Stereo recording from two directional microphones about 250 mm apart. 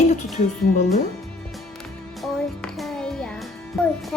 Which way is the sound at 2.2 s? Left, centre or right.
Centre.